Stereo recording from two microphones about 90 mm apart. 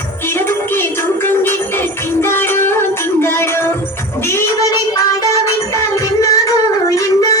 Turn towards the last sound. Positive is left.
turn(degrees=40)  # may be behind; listen again after turning